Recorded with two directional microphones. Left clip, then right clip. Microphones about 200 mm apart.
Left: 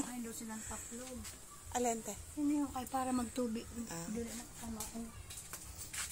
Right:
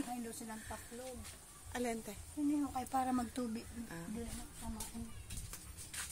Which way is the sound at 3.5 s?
5° right (ahead or behind).